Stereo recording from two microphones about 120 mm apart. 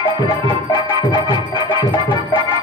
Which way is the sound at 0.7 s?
35° left (ahead or behind).